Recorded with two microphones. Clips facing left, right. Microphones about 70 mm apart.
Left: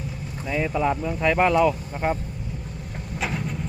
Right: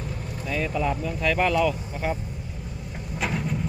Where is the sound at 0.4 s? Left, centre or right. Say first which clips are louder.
Left 3 dB; centre.